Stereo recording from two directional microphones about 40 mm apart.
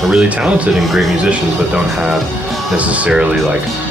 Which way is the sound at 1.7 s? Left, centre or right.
Right.